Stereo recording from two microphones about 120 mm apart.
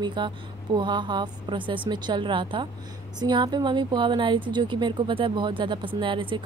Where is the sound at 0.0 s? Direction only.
40° right (ahead or behind).